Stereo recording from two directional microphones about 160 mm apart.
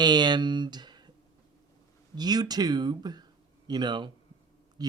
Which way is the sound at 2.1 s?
25° right (ahead or behind).